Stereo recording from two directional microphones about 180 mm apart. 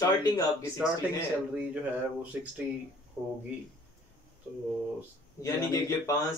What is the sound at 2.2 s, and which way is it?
Speech, 5° right (ahead or behind).